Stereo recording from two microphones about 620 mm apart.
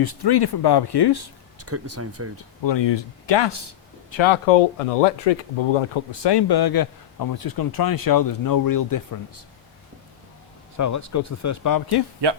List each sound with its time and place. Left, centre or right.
0.0 s speech: left
1.5 s speech: right
2.6 s speech: left
10.8 s speech: left